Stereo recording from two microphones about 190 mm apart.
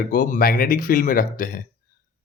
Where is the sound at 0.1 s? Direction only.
50° left (ahead or behind).